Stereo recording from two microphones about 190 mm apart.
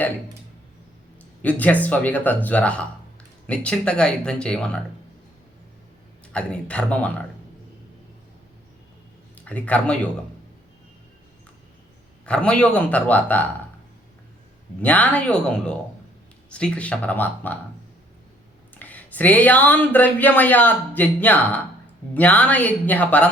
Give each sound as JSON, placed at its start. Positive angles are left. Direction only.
{"t": 1.4, "sound": "speech", "side_deg": 10}
{"t": 6.3, "sound": "speech", "side_deg": 5}
{"t": 9.3, "sound": "speech", "side_deg": 5}
{"t": 12.2, "sound": "speech", "side_deg": 5}
{"t": 14.8, "sound": "speech", "side_deg": 10}
{"t": 18.8, "sound": "speech", "side_deg": 10}